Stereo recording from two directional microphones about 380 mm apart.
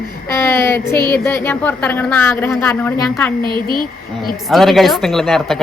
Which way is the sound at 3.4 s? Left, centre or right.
Centre.